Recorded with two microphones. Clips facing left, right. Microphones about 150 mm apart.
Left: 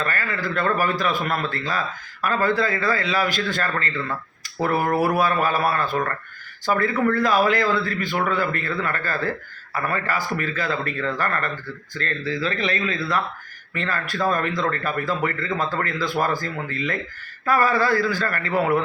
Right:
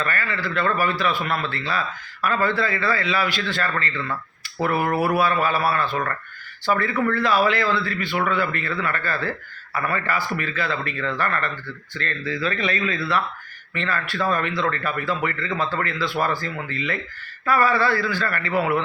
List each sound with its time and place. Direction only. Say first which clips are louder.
0.0 s a man's voice: even; 40° left (ahead or behind)
5.1 s a man's voice: even; 45° left (ahead or behind)